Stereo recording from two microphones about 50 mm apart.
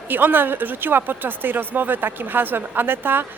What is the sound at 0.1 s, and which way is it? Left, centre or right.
A woman's voice, right.